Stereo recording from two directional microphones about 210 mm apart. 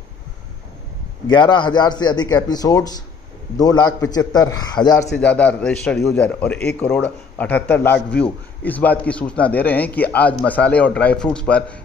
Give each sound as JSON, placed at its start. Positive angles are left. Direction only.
{"t": 1.2, "sound": "a man's voice", "side_deg": 20}
{"t": 5.1, "sound": "a man's voice", "side_deg": 5}